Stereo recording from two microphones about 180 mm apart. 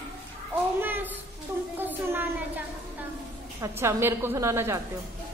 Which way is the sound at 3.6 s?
15° right (ahead or behind).